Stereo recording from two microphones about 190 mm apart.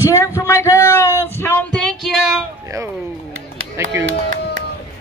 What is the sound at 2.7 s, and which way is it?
Speech, 15° right (ahead or behind).